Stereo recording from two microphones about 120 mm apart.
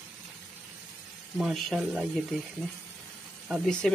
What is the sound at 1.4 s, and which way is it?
Speech, centre (ahead or behind).